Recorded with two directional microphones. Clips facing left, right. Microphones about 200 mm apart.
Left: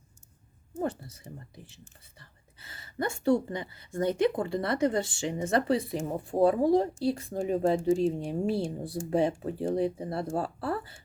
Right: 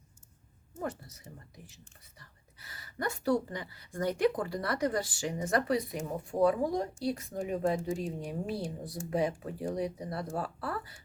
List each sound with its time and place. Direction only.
0.8 s speech: 30° left (ahead or behind)